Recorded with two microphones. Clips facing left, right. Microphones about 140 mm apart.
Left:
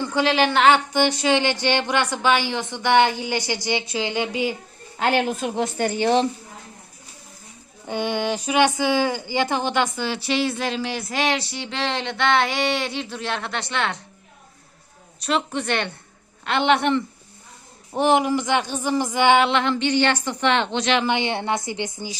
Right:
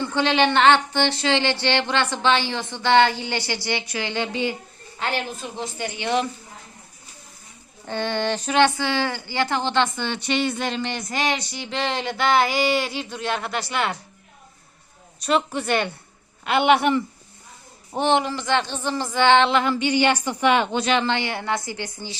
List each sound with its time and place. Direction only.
0.0 s a woman's voice: 10° left (ahead or behind)
4.9 s speech: 55° left (ahead or behind)
7.9 s speech: 10° left (ahead or behind); by 14.0 s 5° right (ahead or behind)
15.2 s speech: centre (ahead or behind)
17.9 s a woman's voice: 5° left (ahead or behind)
19.5 s a woman's voice: 5° right (ahead or behind)
21.0 s a woman's voice: 15° left (ahead or behind)